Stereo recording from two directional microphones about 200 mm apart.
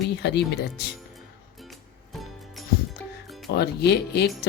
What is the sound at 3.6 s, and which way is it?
Speech, 55° left (ahead or behind).